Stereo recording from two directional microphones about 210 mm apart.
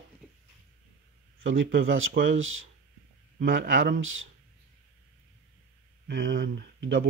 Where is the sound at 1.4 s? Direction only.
65° right (ahead or behind).